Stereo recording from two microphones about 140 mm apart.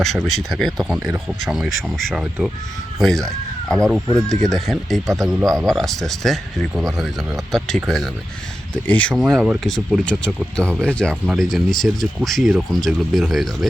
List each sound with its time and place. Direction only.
0.3 s speech: centre (ahead or behind)
5.0 s speech: 25° right (ahead or behind)
5.5 s speech: 5° left (ahead or behind)
9.2 s speech: 5° right (ahead or behind)